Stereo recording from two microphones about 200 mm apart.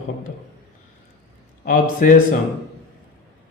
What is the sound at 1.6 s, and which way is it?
Speech, 40° left (ahead or behind).